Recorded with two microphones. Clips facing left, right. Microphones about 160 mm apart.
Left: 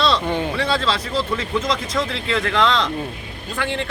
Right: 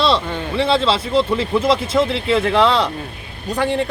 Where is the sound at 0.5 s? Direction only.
25° right (ahead or behind).